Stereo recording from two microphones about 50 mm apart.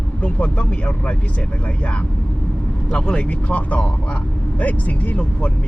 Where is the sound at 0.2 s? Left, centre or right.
Left.